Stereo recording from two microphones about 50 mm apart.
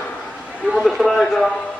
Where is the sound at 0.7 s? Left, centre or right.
Centre.